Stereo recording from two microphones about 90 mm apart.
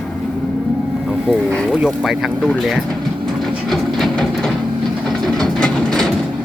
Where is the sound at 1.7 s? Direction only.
5° right (ahead or behind).